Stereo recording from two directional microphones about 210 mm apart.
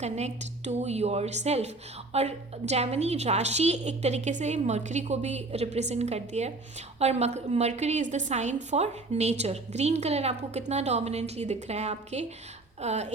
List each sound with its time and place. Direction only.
0.0 s a woman's voice: 35° right (ahead or behind)